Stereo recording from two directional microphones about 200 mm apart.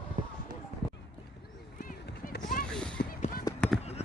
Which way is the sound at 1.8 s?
45° left (ahead or behind).